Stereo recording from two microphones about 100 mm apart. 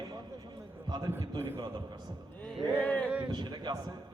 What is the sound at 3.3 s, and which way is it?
Speech, 50° right (ahead or behind).